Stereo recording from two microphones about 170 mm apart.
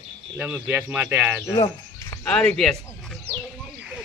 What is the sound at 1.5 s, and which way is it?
Bird, 25° left (ahead or behind).